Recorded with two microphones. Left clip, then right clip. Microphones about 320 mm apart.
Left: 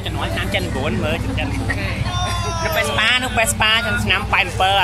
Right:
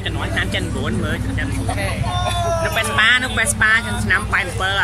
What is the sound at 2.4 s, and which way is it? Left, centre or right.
Speech, centre.